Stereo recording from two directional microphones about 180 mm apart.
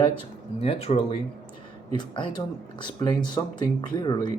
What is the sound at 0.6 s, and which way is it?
Speech, 35° left (ahead or behind).